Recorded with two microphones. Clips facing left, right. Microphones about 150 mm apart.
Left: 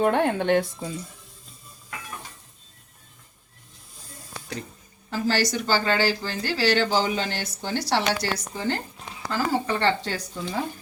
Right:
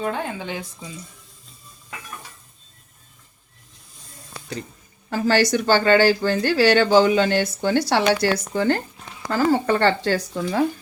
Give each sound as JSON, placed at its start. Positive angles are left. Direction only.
{"t": 0.0, "sound": "a woman's voice", "side_deg": 65}
{"t": 5.1, "sound": "speech", "side_deg": -55}
{"t": 10.0, "sound": "speech", "side_deg": -85}